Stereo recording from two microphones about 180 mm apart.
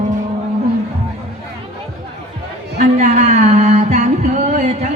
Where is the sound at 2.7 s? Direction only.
40° right (ahead or behind).